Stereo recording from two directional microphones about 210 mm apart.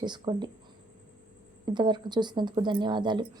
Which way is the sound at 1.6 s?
20° right (ahead or behind).